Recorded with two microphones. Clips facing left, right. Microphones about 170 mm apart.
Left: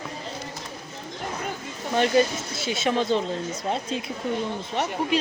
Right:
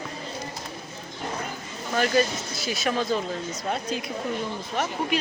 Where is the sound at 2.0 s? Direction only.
25° left (ahead or behind).